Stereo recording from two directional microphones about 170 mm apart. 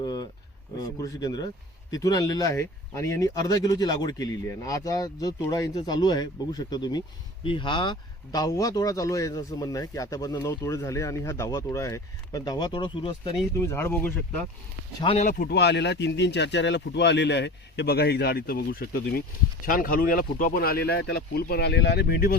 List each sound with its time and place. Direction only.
0.0 s a sound: 25° left (ahead or behind)
0.8 s speech: 20° left (ahead or behind)
13.6 s speech: 15° left (ahead or behind)
15.0 s speech: 40° left (ahead or behind)
15.4 s speech: 75° left (ahead or behind)